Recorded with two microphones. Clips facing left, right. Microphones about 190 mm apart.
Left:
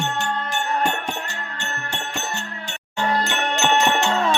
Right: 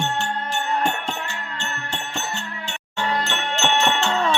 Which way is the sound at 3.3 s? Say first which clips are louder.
Left 2 dB; 15° left (ahead or behind).